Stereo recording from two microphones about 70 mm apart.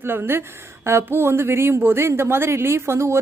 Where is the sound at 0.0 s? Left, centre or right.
Right.